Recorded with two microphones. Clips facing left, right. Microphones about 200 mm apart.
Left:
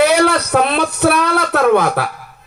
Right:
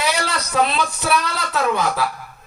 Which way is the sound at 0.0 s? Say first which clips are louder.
Left 11 dB; 60° left (ahead or behind).